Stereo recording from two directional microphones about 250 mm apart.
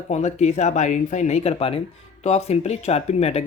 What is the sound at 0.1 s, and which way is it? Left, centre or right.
Speech, left.